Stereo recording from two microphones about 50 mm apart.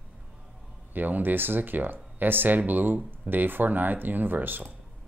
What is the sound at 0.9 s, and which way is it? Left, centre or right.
Speech, right.